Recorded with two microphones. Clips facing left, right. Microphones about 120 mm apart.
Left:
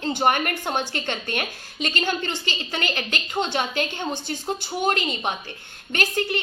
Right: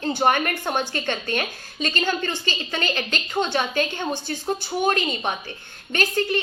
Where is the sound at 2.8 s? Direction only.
15° left (ahead or behind).